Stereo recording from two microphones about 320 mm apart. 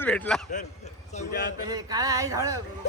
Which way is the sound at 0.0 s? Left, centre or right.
Centre.